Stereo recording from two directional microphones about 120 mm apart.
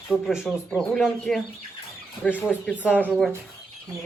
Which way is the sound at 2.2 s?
15° left (ahead or behind).